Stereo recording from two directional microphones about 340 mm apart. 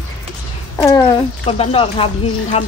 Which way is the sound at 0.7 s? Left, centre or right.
Centre.